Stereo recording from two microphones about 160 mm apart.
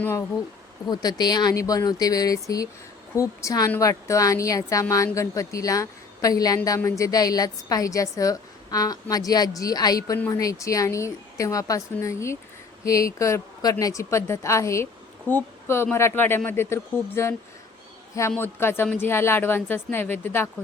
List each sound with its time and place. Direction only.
0.0 s a woman's voice: 15° left (ahead or behind)